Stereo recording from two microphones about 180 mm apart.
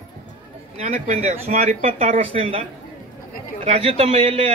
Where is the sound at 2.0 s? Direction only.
35° right (ahead or behind).